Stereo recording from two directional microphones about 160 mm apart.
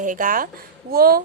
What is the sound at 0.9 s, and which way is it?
Speech, 70° right (ahead or behind).